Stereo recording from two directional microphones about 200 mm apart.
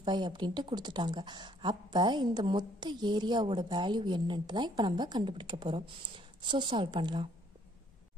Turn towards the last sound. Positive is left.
turn(degrees=-25)  # may be behind; listen again after turning